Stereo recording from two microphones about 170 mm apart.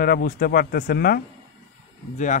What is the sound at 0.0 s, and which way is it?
Speech, 60° left (ahead or behind).